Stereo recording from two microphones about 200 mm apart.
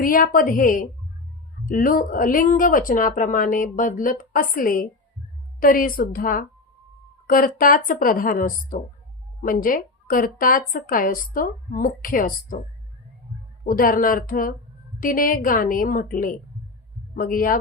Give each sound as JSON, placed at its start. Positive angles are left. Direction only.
{"t": 0.0, "sound": "speech", "side_deg": 45}
{"t": 13.7, "sound": "speech", "side_deg": 45}